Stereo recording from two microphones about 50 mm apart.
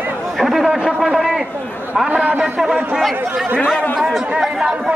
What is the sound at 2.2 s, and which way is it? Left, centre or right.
Speech, right.